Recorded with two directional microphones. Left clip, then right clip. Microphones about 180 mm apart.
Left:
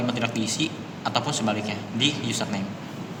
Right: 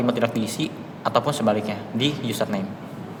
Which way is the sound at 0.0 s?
70° right (ahead or behind).